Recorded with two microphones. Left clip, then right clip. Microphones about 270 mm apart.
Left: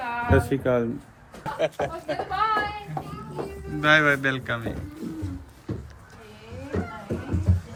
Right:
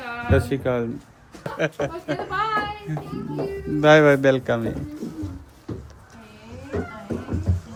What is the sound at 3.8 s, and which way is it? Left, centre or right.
Speech, right.